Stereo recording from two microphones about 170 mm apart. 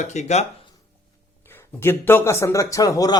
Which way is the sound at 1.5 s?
15° left (ahead or behind).